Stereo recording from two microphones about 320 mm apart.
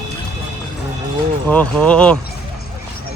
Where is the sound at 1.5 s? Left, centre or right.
Centre.